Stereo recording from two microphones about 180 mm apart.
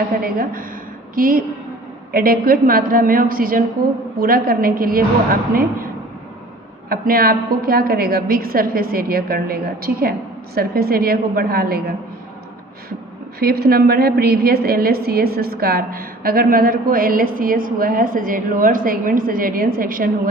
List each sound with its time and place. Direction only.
0.3 s a woman's voice: 50° right (ahead or behind)
6.8 s a woman's voice: 55° right (ahead or behind)
13.4 s a woman's voice: 60° right (ahead or behind)